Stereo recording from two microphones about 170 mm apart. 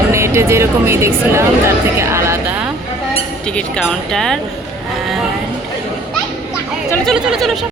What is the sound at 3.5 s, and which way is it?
Speech, 5° left (ahead or behind).